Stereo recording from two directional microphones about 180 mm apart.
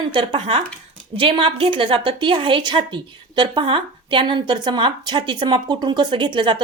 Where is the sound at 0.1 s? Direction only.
30° right (ahead or behind).